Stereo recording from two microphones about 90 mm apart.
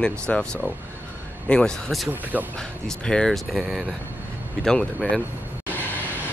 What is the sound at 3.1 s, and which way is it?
Speech, 5° left (ahead or behind).